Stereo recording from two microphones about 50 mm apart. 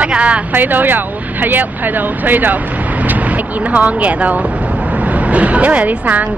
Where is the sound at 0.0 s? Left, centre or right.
Right.